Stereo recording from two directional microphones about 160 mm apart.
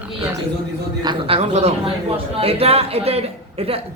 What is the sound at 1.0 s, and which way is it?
A man's voice, 30° right (ahead or behind).